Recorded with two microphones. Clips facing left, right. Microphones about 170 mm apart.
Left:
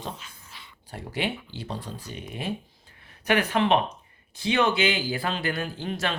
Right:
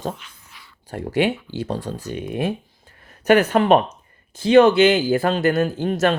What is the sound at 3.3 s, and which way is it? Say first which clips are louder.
Speech: right 8 dB; 45° right (ahead or behind).